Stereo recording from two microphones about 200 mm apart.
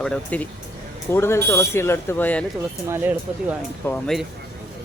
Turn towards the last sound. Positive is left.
turn(degrees=5)  # may be behind; listen again after turning